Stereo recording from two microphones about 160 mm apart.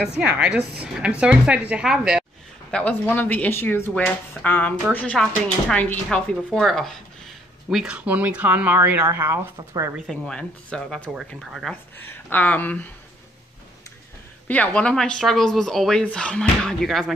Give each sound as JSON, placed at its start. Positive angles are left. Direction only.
{"t": 0.2, "sound": "speech", "side_deg": -10}
{"t": 2.7, "sound": "speech", "side_deg": 10}
{"t": 10.0, "sound": "speech", "side_deg": 5}
{"t": 14.5, "sound": "speech", "side_deg": 10}